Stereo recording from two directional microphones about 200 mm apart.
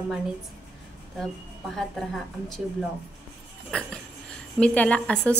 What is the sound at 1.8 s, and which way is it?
Speech, centre (ahead or behind).